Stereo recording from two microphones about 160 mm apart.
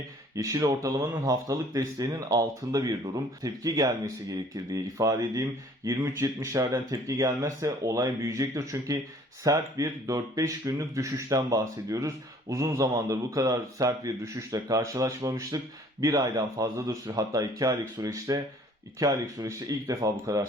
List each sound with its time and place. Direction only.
0.3 s speech: 20° right (ahead or behind)